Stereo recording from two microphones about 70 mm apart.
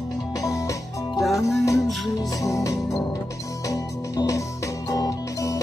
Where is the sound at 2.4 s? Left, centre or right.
Left.